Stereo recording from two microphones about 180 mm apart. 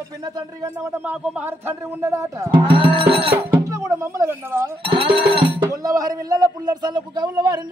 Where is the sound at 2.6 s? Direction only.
30° right (ahead or behind).